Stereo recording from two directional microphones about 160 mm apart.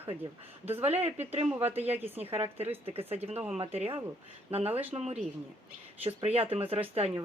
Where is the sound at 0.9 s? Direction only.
40° right (ahead or behind).